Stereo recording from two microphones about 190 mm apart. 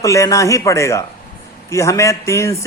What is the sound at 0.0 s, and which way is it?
Speech, 15° left (ahead or behind).